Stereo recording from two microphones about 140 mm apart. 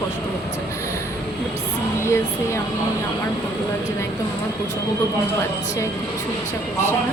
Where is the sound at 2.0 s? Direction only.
20° left (ahead or behind).